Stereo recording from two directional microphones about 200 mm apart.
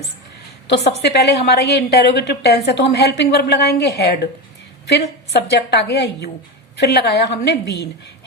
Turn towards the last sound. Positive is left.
turn(degrees=55)  # may be behind; listen again after turning